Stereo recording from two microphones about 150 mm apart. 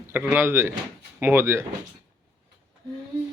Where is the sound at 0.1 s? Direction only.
15° right (ahead or behind).